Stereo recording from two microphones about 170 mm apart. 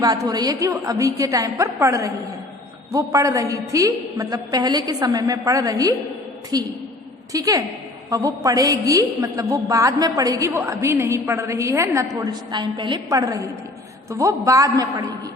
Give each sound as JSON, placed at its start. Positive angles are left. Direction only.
{"t": 0.0, "sound": "a woman's voice", "side_deg": -20}